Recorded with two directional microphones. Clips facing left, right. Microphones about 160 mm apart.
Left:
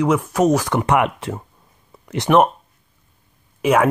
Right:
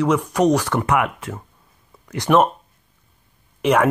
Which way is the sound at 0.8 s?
30° left (ahead or behind).